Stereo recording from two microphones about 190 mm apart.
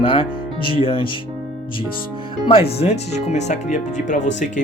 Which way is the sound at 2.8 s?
35° left (ahead or behind).